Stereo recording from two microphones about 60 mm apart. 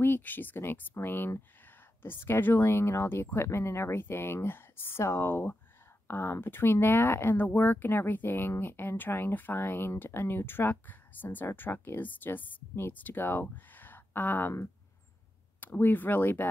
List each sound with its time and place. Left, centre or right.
0.0 s speech: left
15.6 s speech: left